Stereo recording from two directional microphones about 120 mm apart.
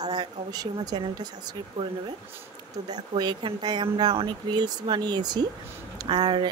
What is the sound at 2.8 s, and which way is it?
Speech, 35° right (ahead or behind).